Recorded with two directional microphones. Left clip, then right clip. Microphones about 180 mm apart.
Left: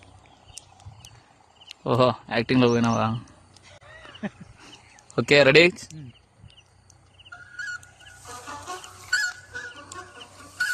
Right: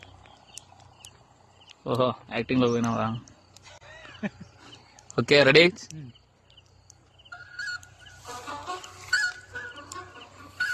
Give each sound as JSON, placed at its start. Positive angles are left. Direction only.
{"t": 1.6, "sound": "speech", "side_deg": 45}
{"t": 2.8, "sound": "speech", "side_deg": 30}
{"t": 3.7, "sound": "a sound", "side_deg": -25}
{"t": 5.1, "sound": "speech", "side_deg": 10}
{"t": 7.3, "sound": "fowl", "side_deg": -10}